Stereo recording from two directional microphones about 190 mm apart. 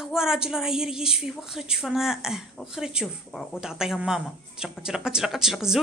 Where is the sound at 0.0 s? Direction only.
Centre (ahead or behind).